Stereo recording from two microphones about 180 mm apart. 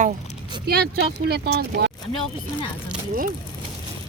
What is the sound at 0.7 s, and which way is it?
Speech, 60° right (ahead or behind).